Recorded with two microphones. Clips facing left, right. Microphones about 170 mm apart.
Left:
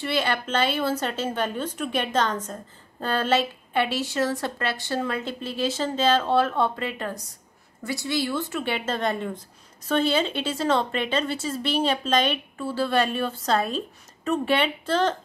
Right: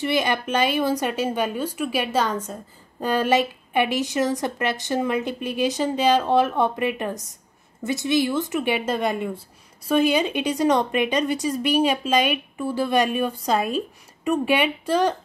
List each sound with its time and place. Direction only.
0.0 s a woman's voice: 15° right (ahead or behind)